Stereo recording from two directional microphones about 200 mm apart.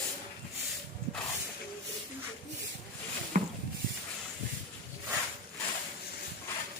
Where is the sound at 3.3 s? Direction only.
40° right (ahead or behind).